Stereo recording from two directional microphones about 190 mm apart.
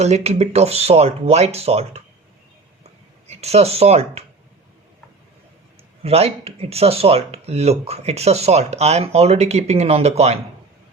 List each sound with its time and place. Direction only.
0.0 s speech: 35° right (ahead or behind)
3.2 s speech: 35° right (ahead or behind)
6.0 s speech: 30° right (ahead or behind)